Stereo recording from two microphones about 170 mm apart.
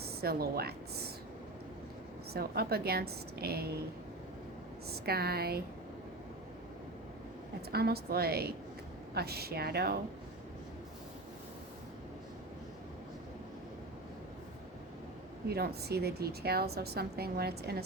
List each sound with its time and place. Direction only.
0.0 s a woman's voice: 65° right (ahead or behind)
2.3 s a woman's voice: 65° right (ahead or behind)
4.9 s a woman's voice: 65° right (ahead or behind)
7.7 s a woman's voice: 65° right (ahead or behind)
15.4 s a woman's voice: 65° right (ahead or behind)